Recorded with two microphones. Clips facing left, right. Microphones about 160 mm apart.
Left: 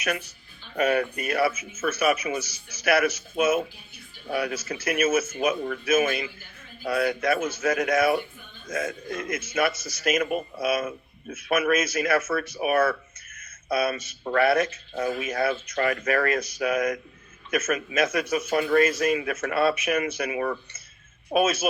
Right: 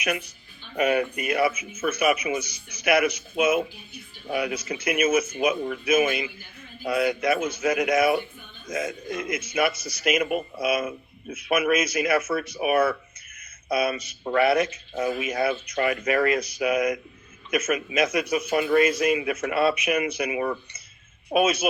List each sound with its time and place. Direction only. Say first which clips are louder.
0.8 s a man's voice: right 1 dB; 15° right (ahead or behind)
21.3 s a man's voice: right 1 dB; centre (ahead or behind)